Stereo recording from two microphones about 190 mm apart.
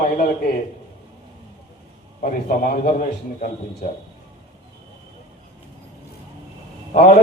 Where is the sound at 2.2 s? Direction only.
45° left (ahead or behind).